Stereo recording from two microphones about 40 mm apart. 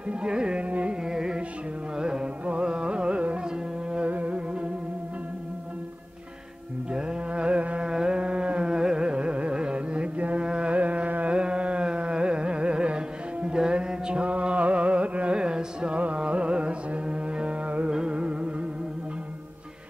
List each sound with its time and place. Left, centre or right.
0.1 s music: right
0.6 s carnatic music: right
1.0 s music: centre
2.4 s carnatic music: right
4.1 s music: right
6.9 s carnatic music: right
7.9 s carnatic music: centre
14.2 s music: right